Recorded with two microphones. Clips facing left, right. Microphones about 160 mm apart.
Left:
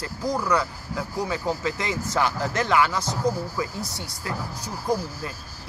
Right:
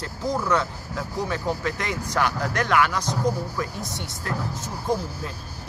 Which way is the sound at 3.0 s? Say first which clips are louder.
Even; 20° right (ahead or behind).